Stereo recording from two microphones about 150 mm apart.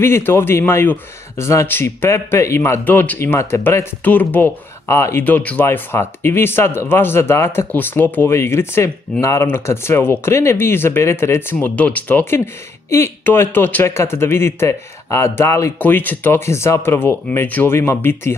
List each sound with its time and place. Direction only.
0.0 s a man's voice: 15° left (ahead or behind)